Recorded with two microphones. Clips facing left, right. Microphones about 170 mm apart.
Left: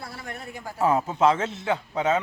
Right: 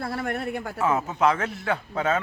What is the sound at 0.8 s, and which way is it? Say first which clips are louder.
A man's voice: left 2 dB; 30° left (ahead or behind).